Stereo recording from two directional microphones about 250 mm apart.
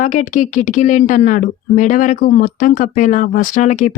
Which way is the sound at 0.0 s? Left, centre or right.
Left.